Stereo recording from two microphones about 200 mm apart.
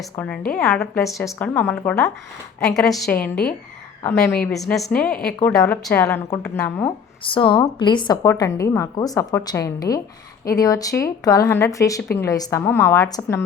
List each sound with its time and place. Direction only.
0.0 s a woman's voice: 5° left (ahead or behind)
1.5 s a woman's voice: 10° left (ahead or behind)
7.3 s a woman's voice: 25° left (ahead or behind)